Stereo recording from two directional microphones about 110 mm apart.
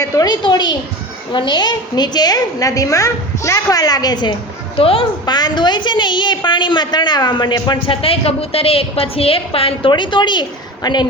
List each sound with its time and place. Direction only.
0.0 s a woman's voice: 30° left (ahead or behind)
0.4 s a woman's voice: 45° left (ahead or behind)
4.8 s a woman's voice: 60° left (ahead or behind)
5.2 s a woman's voice: 40° left (ahead or behind)